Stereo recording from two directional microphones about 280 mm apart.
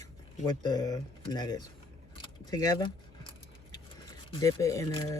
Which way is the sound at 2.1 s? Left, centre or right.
Centre.